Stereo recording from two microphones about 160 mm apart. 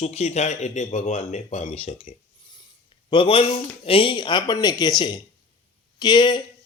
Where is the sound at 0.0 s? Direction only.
45° left (ahead or behind).